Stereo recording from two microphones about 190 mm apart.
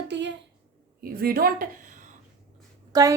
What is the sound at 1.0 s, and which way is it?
Speech, 55° right (ahead or behind).